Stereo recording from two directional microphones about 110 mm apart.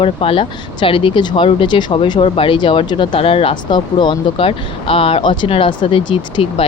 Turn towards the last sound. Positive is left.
turn(degrees=55)  # may be behind; listen again after turning